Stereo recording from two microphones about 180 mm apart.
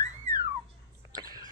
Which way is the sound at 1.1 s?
20° right (ahead or behind).